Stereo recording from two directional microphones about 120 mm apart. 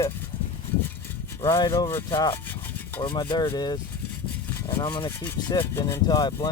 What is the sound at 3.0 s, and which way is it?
Speech, 40° left (ahead or behind).